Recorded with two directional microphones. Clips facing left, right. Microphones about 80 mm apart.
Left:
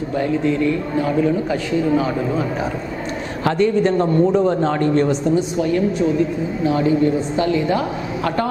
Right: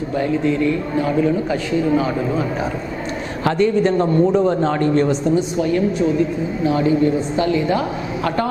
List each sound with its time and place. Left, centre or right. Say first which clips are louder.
3.4 s a man's voice: even; centre
7.7 s a man's voice: even; centre